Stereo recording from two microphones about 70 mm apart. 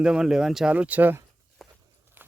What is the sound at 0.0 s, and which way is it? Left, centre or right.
Speech, centre.